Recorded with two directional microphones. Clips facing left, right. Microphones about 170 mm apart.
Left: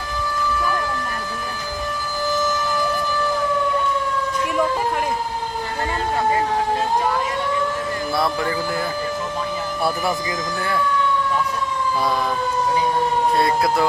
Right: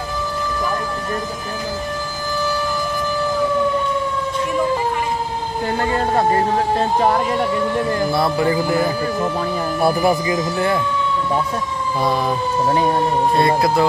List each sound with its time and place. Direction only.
8.1 s music: 20° right (ahead or behind)
9.8 s speech: 20° right (ahead or behind)